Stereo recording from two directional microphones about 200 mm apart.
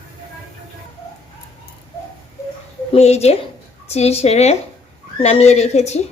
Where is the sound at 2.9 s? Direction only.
30° left (ahead or behind).